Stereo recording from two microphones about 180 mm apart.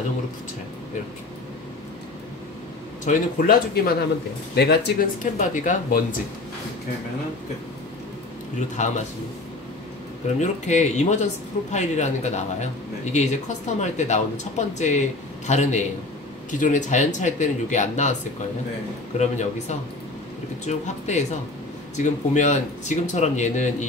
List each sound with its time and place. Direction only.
3.1 s speech: 50° left (ahead or behind)
4.6 s speech: 60° left (ahead or behind); by 5.9 s 45° left (ahead or behind)
8.5 s speech: 40° left (ahead or behind)
10.2 s speech: 40° left (ahead or behind)
19.1 s speech: 40° left (ahead or behind)